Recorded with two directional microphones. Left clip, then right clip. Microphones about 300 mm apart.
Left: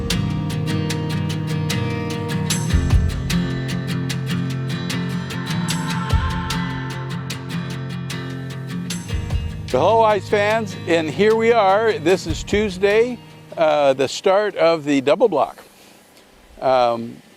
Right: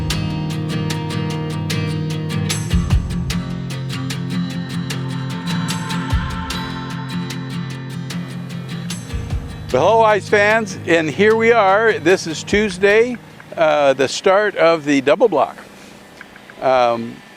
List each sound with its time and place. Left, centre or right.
0.1 s music: centre
9.7 s speech: left
16.6 s speech: left